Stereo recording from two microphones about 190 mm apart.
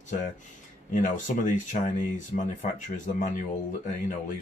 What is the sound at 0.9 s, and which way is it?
Speech, 40° left (ahead or behind).